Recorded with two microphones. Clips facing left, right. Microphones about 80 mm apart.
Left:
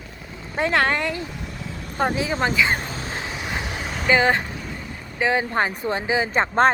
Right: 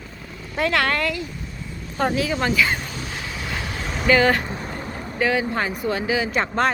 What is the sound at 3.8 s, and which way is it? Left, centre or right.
Vehicle, centre.